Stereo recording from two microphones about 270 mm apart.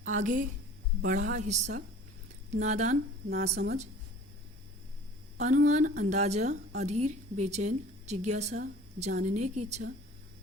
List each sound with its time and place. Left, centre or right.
0.0 s a sound: right
1.0 s a woman's voice: right
5.4 s a woman's voice: right